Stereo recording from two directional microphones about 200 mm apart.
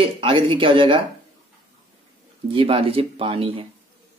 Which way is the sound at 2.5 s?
25° right (ahead or behind).